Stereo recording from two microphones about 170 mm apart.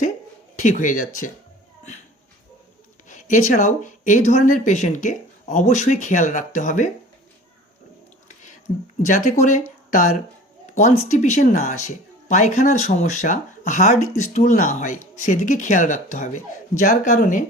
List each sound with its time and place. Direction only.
0.5 s speech: 45° left (ahead or behind)
3.1 s speech: 50° left (ahead or behind)
9.0 s speech: 45° left (ahead or behind)